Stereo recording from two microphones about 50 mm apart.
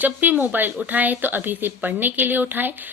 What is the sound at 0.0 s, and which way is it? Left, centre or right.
A woman's voice, right.